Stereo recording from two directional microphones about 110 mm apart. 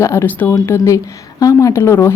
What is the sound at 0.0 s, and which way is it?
A woman's voice, 25° left (ahead or behind).